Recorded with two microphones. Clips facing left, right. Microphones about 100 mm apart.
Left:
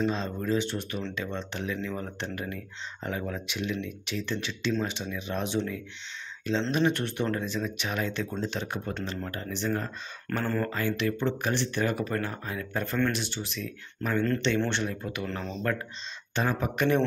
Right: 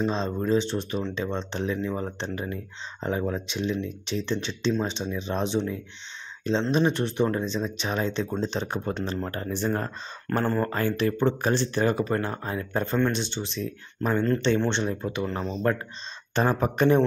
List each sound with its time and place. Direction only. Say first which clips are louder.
0.0 s speech: right 3 dB; 30° right (ahead or behind); by 9.8 s 45° right (ahead or behind)
10.2 s speech: right 4 dB; 35° right (ahead or behind); by 15.5 s 15° right (ahead or behind)
16.3 s speech: right 5 dB; 40° right (ahead or behind)